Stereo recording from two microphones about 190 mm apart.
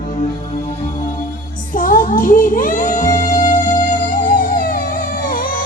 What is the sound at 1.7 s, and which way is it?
Music, 45° left (ahead or behind).